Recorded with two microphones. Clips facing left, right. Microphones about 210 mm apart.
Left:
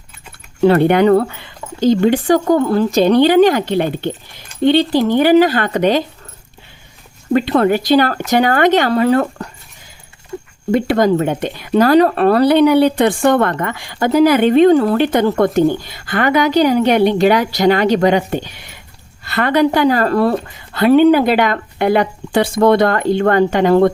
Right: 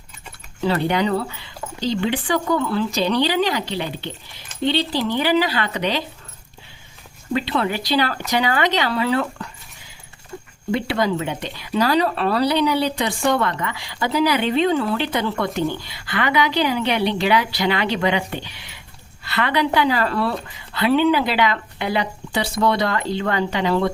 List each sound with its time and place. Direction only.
0.6 s speech: 55° left (ahead or behind)
7.3 s speech: 50° left (ahead or behind)
10.7 s speech: 45° left (ahead or behind)